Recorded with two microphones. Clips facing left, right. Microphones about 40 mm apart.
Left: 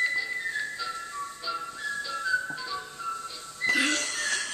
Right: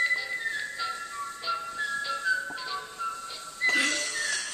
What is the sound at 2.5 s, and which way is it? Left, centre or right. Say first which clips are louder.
Music: even; centre.